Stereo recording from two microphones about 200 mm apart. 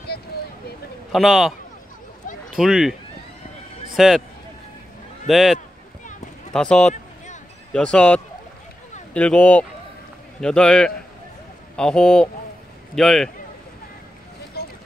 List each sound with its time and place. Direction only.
1.1 s speech: centre (ahead or behind)
2.5 s speech: 5° right (ahead or behind)
5.3 s speech: centre (ahead or behind)
14.6 s a sound: 50° left (ahead or behind)